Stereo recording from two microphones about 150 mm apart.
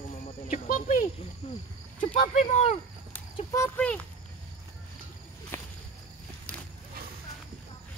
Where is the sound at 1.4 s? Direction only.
40° left (ahead or behind).